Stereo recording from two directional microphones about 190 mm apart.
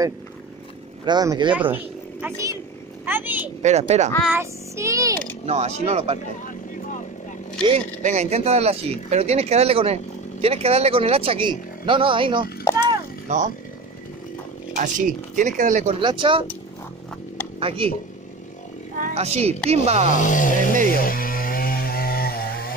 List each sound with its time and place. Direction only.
1.0 s speech: 20° right (ahead or behind)
1.5 s speech: 10° right (ahead or behind)
3.6 s speech: 35° right (ahead or behind)
4.2 s speech: 10° right (ahead or behind)
5.5 s speech: 35° right (ahead or behind)
7.6 s speech: 35° right (ahead or behind)
12.7 s speech: 15° left (ahead or behind)
13.3 s speech: 40° right (ahead or behind)
14.8 s speech: 45° right (ahead or behind)
16.0 s speech: 25° right (ahead or behind)
17.6 s speech: 30° right (ahead or behind)
19.1 s speech: 35° right (ahead or behind)
20.1 s music: 40° left (ahead or behind)
21.0 s chainsaw: 50° left (ahead or behind)